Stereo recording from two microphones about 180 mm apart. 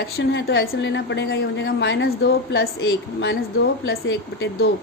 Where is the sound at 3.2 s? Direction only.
80° left.